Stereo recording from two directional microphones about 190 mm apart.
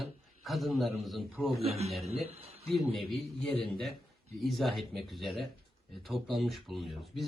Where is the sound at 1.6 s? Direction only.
35° right (ahead or behind).